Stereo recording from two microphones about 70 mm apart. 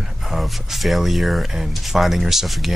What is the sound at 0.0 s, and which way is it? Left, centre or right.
Speech, centre.